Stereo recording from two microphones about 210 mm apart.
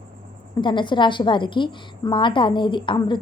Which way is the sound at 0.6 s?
20° left (ahead or behind).